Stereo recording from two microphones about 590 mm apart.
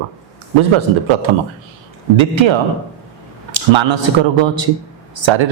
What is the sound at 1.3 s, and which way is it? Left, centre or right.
A man's voice, right.